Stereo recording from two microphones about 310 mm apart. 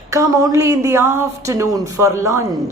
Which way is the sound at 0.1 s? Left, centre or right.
Centre.